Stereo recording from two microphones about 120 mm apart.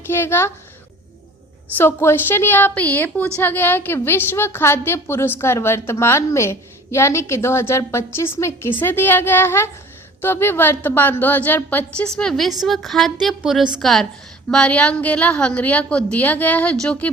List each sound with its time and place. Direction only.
0.1 s a woman's voice: 20° left (ahead or behind)
1.8 s a woman's voice: 20° left (ahead or behind)